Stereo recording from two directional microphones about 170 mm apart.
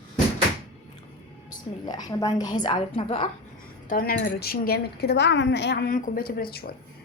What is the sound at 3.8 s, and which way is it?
A woman's voice, 60° left (ahead or behind).